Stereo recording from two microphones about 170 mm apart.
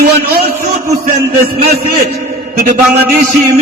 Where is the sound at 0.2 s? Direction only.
65° right (ahead or behind).